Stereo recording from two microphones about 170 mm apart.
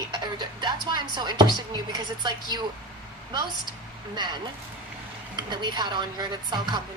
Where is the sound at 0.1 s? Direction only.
25° right (ahead or behind).